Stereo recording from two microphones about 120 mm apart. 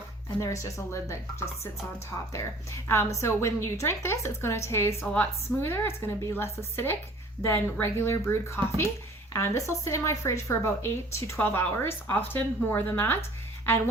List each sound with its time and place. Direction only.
0.3 s a woman's voice: 25° left (ahead or behind)